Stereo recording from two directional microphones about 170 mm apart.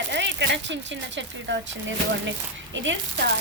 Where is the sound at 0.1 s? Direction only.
90° right.